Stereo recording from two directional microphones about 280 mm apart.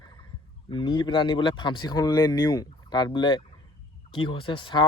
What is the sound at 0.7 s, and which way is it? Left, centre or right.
Speech, centre.